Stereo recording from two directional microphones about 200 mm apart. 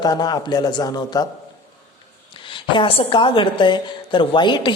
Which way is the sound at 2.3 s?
25° left (ahead or behind).